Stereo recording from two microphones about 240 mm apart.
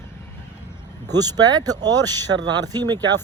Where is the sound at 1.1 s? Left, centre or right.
Centre.